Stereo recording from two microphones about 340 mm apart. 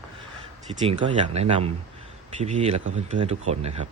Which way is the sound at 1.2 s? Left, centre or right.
Centre.